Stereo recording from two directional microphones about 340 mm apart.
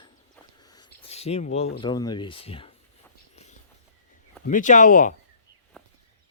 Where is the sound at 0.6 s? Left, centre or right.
Centre.